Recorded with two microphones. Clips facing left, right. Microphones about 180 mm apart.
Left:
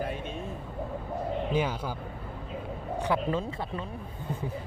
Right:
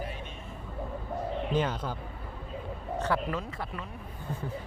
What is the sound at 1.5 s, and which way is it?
Speech, 10° left (ahead or behind).